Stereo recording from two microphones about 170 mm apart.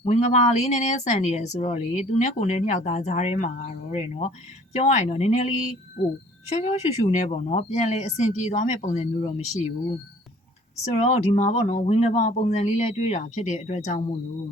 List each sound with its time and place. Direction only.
0.0 s speech: 45° left (ahead or behind)
11.0 s speech: 40° left (ahead or behind)